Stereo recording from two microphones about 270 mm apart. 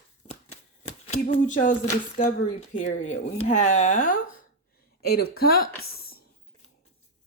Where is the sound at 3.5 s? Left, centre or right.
Left.